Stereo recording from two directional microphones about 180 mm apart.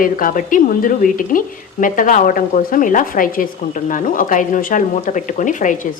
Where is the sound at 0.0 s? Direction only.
50° left (ahead or behind).